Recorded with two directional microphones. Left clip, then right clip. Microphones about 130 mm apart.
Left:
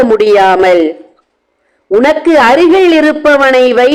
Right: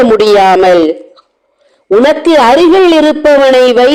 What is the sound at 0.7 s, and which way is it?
Speech, 45° right (ahead or behind).